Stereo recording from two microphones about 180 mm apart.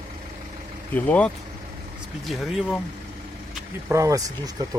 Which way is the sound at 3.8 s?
15° right (ahead or behind).